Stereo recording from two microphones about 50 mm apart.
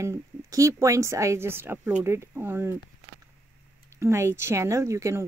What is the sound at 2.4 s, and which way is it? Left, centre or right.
Speech, right.